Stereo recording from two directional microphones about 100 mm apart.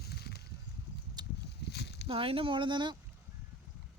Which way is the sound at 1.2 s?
45° right (ahead or behind).